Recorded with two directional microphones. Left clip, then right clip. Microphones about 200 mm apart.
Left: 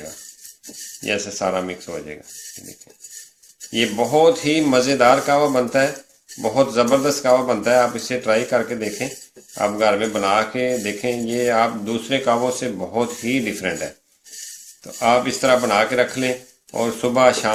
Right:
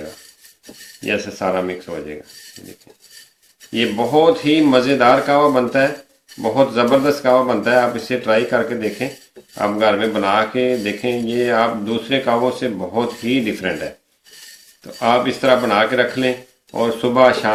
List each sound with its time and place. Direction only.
1.0 s speech: 30° left (ahead or behind)
3.7 s speech: 30° left (ahead or behind)
14.9 s speech: 30° left (ahead or behind)